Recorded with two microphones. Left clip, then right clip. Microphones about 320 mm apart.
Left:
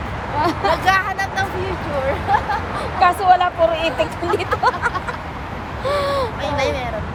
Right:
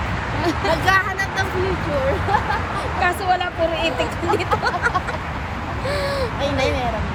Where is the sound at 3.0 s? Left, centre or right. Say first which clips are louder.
Left 7 dB; centre.